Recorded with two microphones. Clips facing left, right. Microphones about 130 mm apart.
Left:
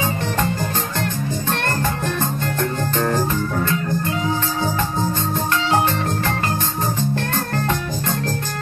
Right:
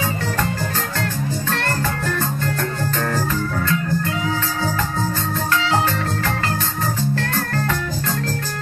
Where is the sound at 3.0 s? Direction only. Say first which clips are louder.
Left 3 dB; 20° left (ahead or behind).